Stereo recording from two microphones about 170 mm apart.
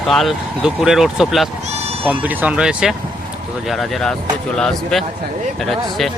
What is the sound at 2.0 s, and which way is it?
Speech, 10° right (ahead or behind).